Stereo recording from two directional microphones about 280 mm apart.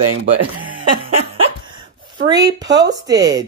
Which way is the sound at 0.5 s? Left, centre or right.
Centre.